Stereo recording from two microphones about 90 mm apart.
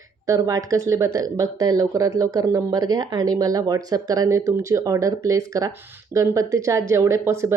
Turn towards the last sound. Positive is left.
turn(degrees=-30)  # may be behind; listen again after turning